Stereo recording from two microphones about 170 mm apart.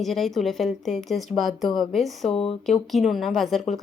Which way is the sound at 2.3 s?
35° left (ahead or behind).